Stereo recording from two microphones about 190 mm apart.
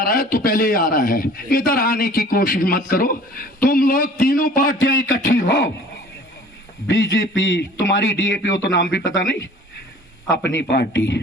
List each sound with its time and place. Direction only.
0.0 s a man's voice: 50° left (ahead or behind)
6.8 s a man's voice: 70° left (ahead or behind)
10.6 s a man's voice: 65° left (ahead or behind)